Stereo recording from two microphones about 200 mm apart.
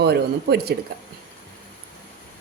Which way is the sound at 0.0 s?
55° right (ahead or behind).